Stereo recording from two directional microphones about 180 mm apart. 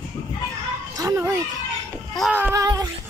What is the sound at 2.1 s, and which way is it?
Speech, 5° right (ahead or behind).